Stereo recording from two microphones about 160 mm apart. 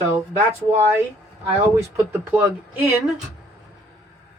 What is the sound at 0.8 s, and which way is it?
Speech, 15° right (ahead or behind).